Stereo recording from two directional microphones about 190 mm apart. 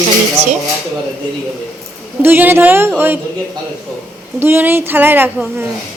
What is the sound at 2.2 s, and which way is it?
A woman's voice, 10° right (ahead or behind).